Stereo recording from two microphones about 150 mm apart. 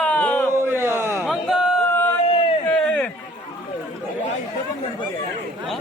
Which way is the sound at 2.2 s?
40° left (ahead or behind).